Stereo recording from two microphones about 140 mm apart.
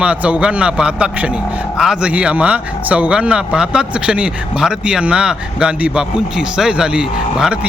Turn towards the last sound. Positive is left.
turn(degrees=-5)  # may be behind; listen again after turning